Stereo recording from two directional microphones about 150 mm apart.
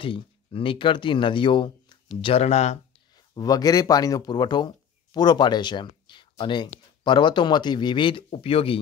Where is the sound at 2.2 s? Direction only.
45° left (ahead or behind).